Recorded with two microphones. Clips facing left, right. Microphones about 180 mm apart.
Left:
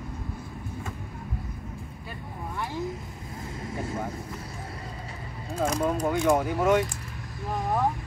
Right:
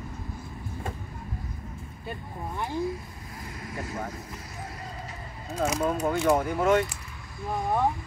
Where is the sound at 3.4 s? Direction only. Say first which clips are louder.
Left 3 dB; 25° left (ahead or behind).